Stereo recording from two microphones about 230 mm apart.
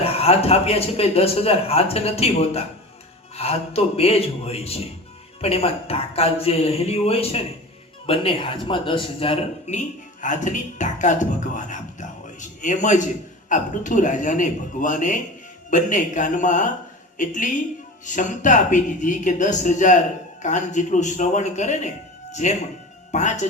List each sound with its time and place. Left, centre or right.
0.0 s a man's voice: left